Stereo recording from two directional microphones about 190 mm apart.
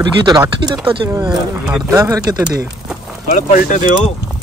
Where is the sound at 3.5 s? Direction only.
45° left (ahead or behind).